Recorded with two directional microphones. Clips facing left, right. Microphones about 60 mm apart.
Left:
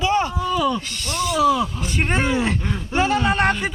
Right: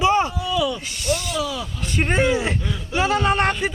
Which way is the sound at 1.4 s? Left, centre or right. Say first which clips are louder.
Left 9 dB; left.